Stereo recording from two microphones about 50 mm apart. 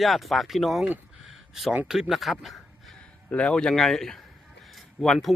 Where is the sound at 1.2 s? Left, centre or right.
Centre.